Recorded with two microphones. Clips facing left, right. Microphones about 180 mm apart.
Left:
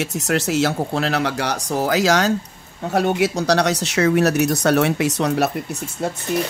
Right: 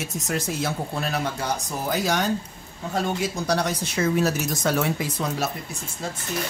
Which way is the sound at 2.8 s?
70° left (ahead or behind).